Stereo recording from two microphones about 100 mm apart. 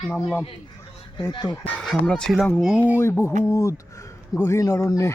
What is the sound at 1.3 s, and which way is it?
Speech, 45° left (ahead or behind).